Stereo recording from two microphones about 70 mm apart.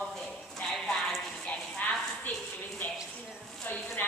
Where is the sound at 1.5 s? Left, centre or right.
Left.